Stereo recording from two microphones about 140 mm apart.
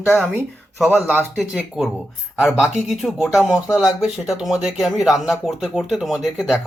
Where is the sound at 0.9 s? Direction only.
10° right (ahead or behind).